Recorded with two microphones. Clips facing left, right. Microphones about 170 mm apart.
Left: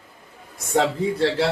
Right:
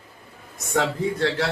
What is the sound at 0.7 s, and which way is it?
Speech, 30° left (ahead or behind).